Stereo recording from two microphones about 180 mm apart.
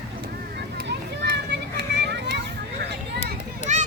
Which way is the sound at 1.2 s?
70° right (ahead or behind).